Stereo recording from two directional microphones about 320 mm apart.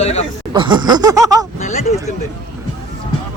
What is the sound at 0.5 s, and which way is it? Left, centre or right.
Chuckle, centre.